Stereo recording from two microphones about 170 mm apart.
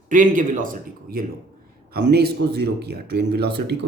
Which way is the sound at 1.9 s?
70° right (ahead or behind).